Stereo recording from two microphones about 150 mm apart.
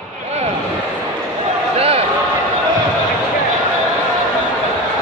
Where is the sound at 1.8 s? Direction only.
40° right (ahead or behind).